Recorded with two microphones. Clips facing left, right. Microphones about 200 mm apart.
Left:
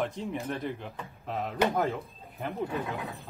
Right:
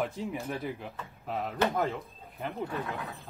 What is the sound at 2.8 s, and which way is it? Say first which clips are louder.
Speech: left 2 dB; 15° left (ahead or behind).